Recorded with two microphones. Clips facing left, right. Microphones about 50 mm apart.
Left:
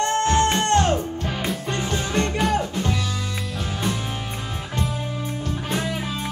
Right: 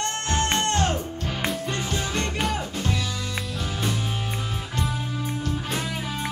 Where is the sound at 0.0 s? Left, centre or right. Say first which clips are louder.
Left 7 dB; left.